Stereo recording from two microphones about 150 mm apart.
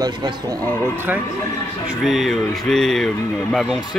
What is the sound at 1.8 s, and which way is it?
Speech, centre (ahead or behind).